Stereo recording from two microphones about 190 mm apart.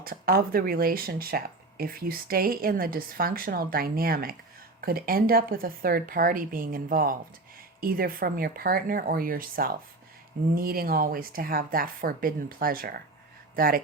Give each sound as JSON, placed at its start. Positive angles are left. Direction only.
{"t": 0.0, "sound": "speech", "side_deg": -50}